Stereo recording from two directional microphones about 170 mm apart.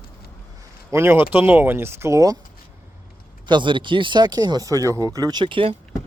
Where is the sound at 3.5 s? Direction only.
25° right (ahead or behind).